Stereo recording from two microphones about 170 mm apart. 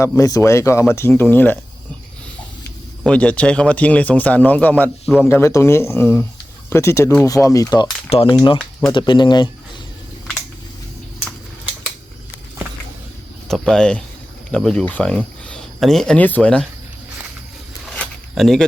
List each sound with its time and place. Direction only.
0.2 s speech: 20° left (ahead or behind)
3.0 s speech: 5° left (ahead or behind)
5.3 s speech: 15° left (ahead or behind)
8.1 s speech: 35° left (ahead or behind)
13.5 s speech: 5° left (ahead or behind)
17.9 s zipper: 5° left (ahead or behind)